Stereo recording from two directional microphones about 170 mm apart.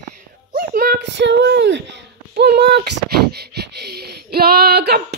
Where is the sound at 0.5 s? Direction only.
60° right (ahead or behind).